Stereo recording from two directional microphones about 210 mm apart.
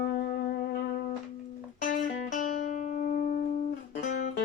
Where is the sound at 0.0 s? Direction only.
50° left (ahead or behind).